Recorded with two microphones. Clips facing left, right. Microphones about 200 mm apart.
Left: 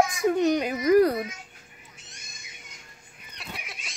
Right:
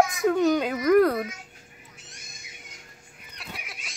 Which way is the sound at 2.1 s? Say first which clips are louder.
Right 1 dB; 55° right (ahead or behind).